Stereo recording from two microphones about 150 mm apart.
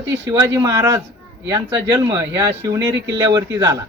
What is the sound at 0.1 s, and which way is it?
Speech, 20° right (ahead or behind).